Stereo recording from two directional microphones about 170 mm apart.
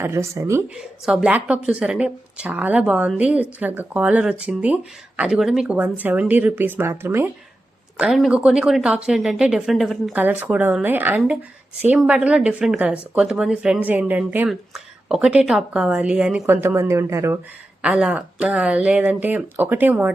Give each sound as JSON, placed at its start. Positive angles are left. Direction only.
{"t": 0.0, "sound": "speech", "side_deg": -15}
{"t": 0.8, "sound": "speech", "side_deg": -5}
{"t": 7.9, "sound": "speech", "side_deg": -5}
{"t": 17.8, "sound": "speech", "side_deg": -5}